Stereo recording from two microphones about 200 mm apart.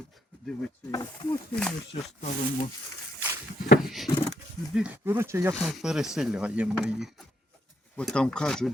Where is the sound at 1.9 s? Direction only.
35° left (ahead or behind).